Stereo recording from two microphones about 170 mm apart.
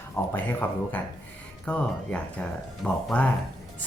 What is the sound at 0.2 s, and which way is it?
Speech, 15° left (ahead or behind).